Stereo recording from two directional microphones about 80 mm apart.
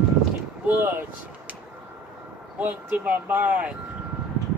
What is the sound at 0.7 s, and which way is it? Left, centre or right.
Speech, right.